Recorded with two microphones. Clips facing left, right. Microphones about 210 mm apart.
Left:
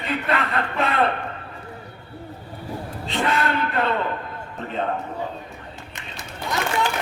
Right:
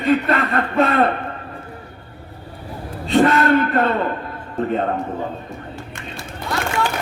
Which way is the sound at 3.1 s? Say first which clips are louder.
Right 9 dB; 45° right (ahead or behind).